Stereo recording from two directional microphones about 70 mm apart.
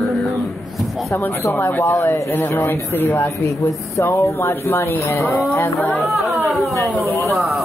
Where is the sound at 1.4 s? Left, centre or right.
Left.